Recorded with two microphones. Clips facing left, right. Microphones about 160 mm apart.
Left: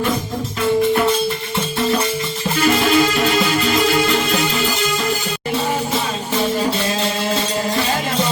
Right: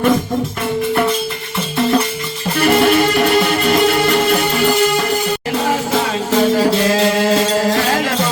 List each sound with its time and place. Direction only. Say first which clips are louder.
2.6 s music: right 3 dB; 60° right (ahead or behind)
6.6 s music: right 6 dB; 75° right (ahead or behind)